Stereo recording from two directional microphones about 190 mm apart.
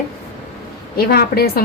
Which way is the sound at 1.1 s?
55° left (ahead or behind).